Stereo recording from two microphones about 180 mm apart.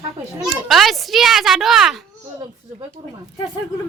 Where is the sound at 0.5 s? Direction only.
Centre (ahead or behind).